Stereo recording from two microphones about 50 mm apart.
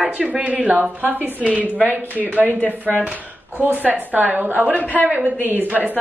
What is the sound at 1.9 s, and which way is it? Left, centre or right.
Speech, right.